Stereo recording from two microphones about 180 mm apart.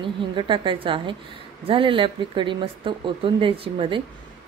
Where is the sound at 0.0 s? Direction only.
25° right (ahead or behind).